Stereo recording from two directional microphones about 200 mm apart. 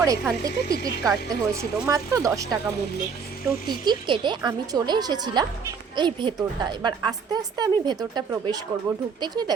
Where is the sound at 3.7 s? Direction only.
25° right (ahead or behind).